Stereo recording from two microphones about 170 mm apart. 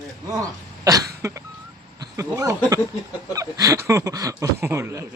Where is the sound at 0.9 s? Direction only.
20° right (ahead or behind).